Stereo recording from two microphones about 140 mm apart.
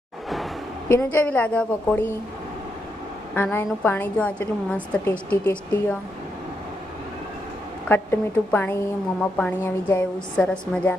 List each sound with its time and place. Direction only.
0.9 s a woman's voice: 15° left (ahead or behind)
3.3 s a woman's voice: 15° left (ahead or behind)
7.9 s a woman's voice: 15° left (ahead or behind)